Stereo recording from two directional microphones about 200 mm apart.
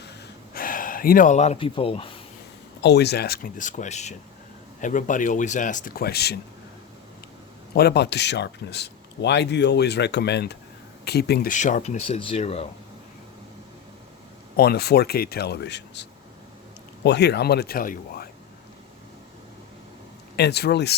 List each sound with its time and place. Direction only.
0.5 s speech: 45° left (ahead or behind); by 2.0 s 25° left (ahead or behind)
2.8 s speech: 55° left (ahead or behind)
7.7 s speech: 55° left (ahead or behind); by 12.6 s 30° left (ahead or behind)
14.5 s speech: 50° left (ahead or behind)
20.3 s speech: 55° left (ahead or behind)